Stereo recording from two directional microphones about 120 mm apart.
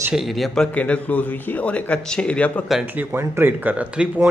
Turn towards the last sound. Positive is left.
turn(degrees=-10)  # may be behind; listen again after turning